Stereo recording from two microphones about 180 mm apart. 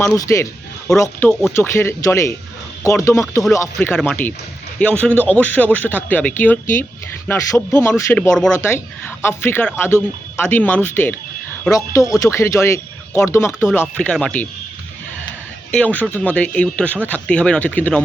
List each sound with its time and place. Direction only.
0.1 s speech: 20° left (ahead or behind)
15.7 s speech: 10° left (ahead or behind)